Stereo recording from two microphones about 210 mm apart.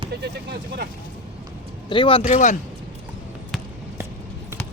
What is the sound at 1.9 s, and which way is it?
Speech, 25° left (ahead or behind).